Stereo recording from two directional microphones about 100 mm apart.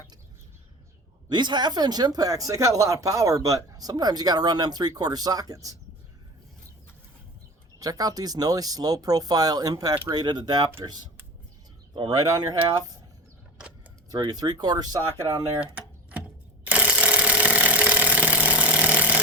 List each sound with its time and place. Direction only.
1.3 s speech: 50° right (ahead or behind)
7.8 s speech: 40° right (ahead or behind)
12.1 s speech: 35° right (ahead or behind)
14.2 s speech: 45° right (ahead or behind)
16.6 s engine: 15° right (ahead or behind)